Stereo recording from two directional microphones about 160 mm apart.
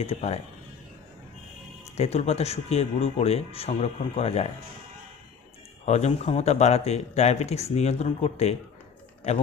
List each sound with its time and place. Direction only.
0.0 s speech: 40° left (ahead or behind)
2.0 s speech: 40° left (ahead or behind)
5.8 s speech: 45° left (ahead or behind)